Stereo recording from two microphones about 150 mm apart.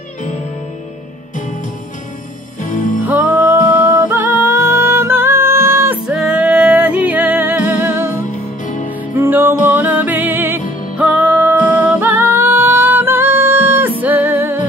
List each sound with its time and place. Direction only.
3.1 s music: 10° right (ahead or behind)
6.0 s music: 5° right (ahead or behind)
8.6 s music: 60° left (ahead or behind)
9.1 s music: 15° right (ahead or behind)